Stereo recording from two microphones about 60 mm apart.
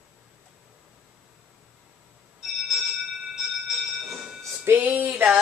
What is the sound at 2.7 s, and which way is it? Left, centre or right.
Bell, centre.